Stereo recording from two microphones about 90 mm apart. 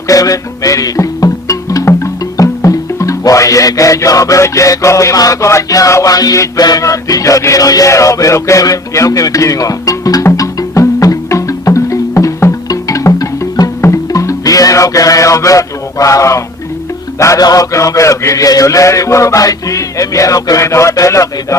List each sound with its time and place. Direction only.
0.1 s music: 40° left (ahead or behind)